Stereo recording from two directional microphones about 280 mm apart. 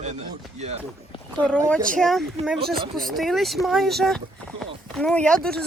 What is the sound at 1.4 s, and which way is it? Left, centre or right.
Speech, centre.